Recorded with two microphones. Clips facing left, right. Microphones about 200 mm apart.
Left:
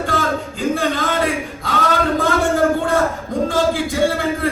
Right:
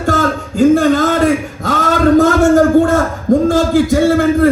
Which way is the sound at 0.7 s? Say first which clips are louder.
Right 7 dB; 45° right (ahead or behind).